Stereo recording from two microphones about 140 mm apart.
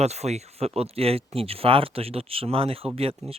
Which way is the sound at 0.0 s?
50° right (ahead or behind).